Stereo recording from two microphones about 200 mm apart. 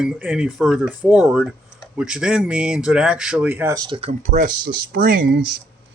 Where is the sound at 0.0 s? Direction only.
5° right (ahead or behind); by 5.4 s 45° right (ahead or behind).